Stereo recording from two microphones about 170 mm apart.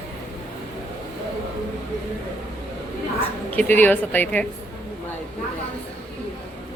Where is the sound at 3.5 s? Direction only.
10° left (ahead or behind).